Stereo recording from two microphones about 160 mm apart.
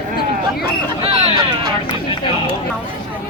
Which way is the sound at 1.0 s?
40° right (ahead or behind).